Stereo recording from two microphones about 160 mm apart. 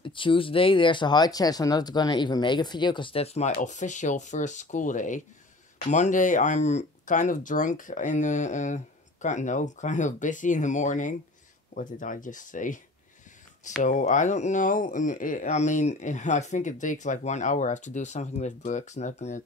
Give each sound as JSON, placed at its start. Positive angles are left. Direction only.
{"t": 0.0, "sound": "speech", "side_deg": 30}
{"t": 13.8, "sound": "speech", "side_deg": 50}